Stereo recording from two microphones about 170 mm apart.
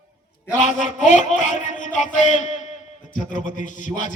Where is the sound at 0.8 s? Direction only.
45° left (ahead or behind).